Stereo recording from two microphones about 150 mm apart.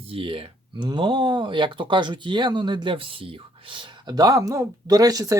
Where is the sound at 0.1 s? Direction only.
35° right (ahead or behind).